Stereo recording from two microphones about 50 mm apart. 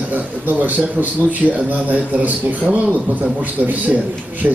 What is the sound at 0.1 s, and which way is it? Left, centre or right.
A man's voice, right.